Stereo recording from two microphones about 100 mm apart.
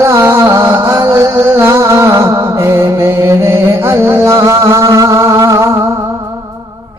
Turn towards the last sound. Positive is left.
turn(degrees=-30)  # may be behind; listen again after turning